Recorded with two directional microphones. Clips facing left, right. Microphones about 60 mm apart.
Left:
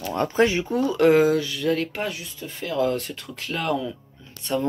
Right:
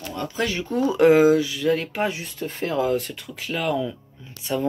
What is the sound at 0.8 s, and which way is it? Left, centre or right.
Speech, centre.